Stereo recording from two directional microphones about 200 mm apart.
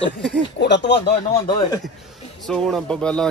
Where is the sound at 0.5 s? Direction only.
60° left (ahead or behind).